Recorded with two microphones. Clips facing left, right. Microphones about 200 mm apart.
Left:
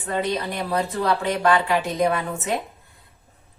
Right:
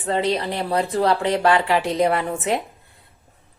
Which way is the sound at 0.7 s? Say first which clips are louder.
Right 4 dB; 30° right (ahead or behind).